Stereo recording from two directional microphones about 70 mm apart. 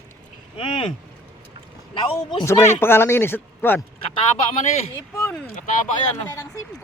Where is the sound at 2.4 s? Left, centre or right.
Left.